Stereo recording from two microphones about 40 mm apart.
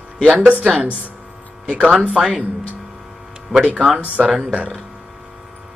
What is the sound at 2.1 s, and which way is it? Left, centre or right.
Speech, centre.